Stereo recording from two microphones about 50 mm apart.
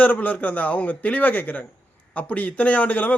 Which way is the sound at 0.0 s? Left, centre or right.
Left.